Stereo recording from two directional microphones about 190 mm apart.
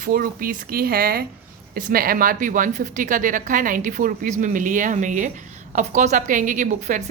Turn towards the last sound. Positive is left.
turn(degrees=-40)  # may be behind; listen again after turning